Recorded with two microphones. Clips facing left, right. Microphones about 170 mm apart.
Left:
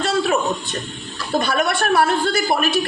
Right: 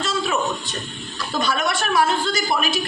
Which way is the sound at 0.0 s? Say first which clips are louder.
Left 5 dB; 60° left (ahead or behind).